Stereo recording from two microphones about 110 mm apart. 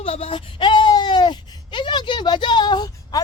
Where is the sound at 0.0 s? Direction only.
60° left (ahead or behind).